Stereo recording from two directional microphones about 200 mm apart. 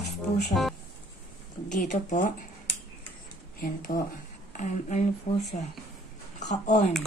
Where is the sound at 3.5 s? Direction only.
45° left (ahead or behind).